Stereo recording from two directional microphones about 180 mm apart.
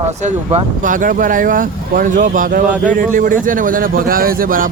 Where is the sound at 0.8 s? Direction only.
45° right (ahead or behind).